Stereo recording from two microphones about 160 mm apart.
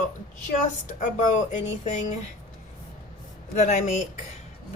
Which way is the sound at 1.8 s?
45° left (ahead or behind).